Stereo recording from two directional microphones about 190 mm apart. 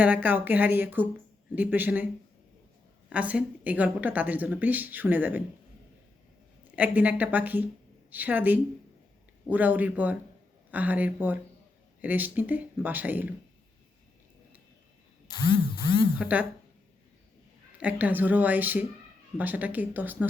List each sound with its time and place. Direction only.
0.0 s a woman's voice: 10° right (ahead or behind)
3.1 s a woman's voice: 5° right (ahead or behind)
6.7 s a woman's voice: 10° right (ahead or behind)
15.3 s speech: 20° left (ahead or behind)
16.1 s a woman's voice: 10° right (ahead or behind)
17.7 s a woman's voice: 10° right (ahead or behind)